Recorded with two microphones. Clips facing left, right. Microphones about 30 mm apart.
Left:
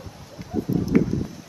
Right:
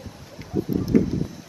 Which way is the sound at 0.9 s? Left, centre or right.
Left.